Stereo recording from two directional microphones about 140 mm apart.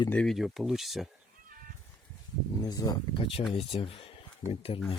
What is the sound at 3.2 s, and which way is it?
Speech, 40° left (ahead or behind).